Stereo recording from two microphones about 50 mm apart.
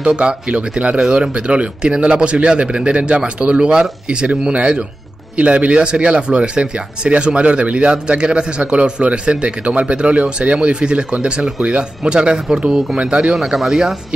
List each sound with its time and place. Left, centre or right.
0.0 s speech: right
13.3 s speech: centre